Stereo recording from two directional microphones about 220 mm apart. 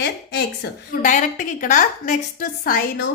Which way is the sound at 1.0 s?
35° left (ahead or behind).